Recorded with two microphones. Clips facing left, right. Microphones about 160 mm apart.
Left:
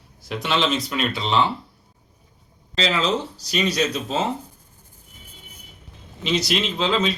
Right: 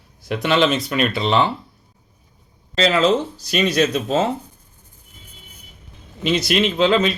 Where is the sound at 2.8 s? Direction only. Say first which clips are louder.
Right 6 dB; 50° right (ahead or behind).